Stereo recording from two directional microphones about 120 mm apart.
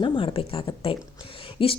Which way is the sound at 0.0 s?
50° left (ahead or behind).